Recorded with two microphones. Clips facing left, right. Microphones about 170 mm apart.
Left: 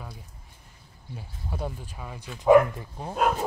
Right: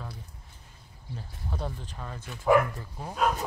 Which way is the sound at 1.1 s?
10° left (ahead or behind).